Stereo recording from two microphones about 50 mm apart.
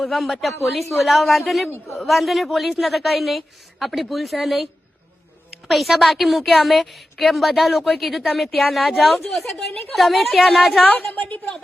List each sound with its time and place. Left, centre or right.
0.0 s a woman's voice: centre
10.8 s a woman's voice: left